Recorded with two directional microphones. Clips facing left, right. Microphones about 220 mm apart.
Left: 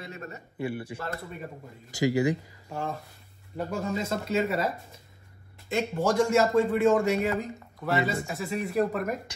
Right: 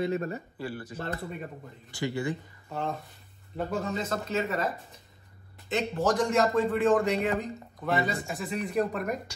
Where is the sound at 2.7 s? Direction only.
Centre (ahead or behind).